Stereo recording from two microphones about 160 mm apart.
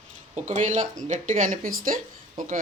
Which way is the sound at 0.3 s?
50° right (ahead or behind).